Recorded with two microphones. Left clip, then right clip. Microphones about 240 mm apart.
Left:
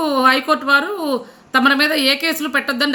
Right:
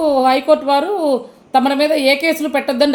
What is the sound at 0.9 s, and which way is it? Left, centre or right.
Speech, left.